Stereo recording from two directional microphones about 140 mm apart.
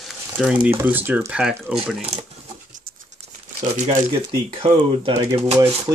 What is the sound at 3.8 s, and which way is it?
Speech, 35° right (ahead or behind).